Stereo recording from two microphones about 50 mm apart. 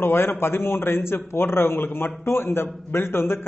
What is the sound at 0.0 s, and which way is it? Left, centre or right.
A man's voice, left.